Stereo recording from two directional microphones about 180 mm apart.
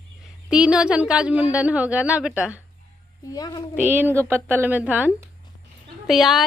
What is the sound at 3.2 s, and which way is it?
Speech, 20° left (ahead or behind).